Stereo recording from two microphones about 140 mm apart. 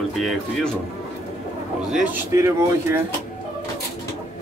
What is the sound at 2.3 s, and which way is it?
Speech, 20° right (ahead or behind).